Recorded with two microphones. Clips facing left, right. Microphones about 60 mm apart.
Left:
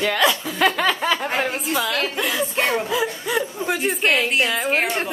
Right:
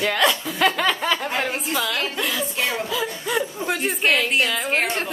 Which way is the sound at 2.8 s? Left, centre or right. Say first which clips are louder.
Left 3 dB; left.